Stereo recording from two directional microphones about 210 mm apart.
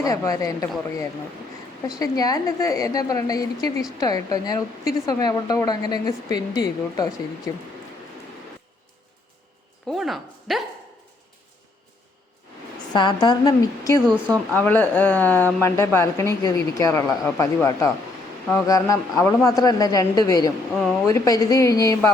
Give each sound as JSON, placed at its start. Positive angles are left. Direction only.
{"t": 0.0, "sound": "speech", "side_deg": 15}
{"t": 2.0, "sound": "speech", "side_deg": 15}
{"t": 9.9, "sound": "speech", "side_deg": 0}
{"t": 12.9, "sound": "a woman's voice", "side_deg": 20}